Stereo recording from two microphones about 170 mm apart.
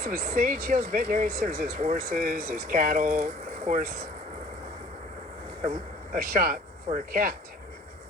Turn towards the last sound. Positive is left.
turn(degrees=-55)  # may be behind; listen again after turning